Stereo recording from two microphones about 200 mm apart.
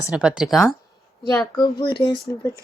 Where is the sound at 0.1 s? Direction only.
5° right (ahead or behind).